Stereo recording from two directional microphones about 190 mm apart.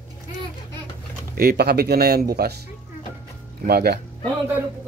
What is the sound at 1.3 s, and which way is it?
Speech, 55° right (ahead or behind).